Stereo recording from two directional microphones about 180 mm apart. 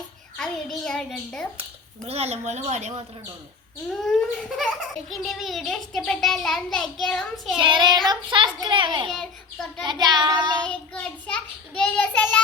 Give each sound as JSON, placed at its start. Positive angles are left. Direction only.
{"t": 0.3, "sound": "a child's voice", "side_deg": 0}
{"t": 2.0, "sound": "speech", "side_deg": -35}
{"t": 4.0, "sound": "a child's voice", "side_deg": 0}
{"t": 7.6, "sound": "a child's voice", "side_deg": -25}
{"t": 9.0, "sound": "a child's voice", "side_deg": 0}
{"t": 9.8, "sound": "a child's voice", "side_deg": -25}
{"t": 10.6, "sound": "child singing", "side_deg": 5}